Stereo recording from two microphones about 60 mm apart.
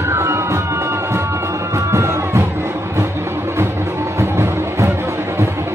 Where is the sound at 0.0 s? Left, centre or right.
Right.